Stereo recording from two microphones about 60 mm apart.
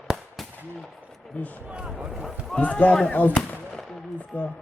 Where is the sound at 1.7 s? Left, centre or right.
Centre.